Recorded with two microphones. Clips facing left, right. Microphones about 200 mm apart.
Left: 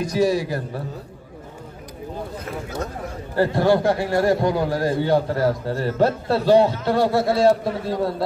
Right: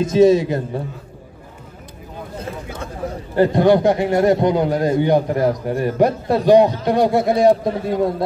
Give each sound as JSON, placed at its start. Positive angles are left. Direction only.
{"t": 0.0, "sound": "a man's voice", "side_deg": -20}
{"t": 3.3, "sound": "a man's voice", "side_deg": -20}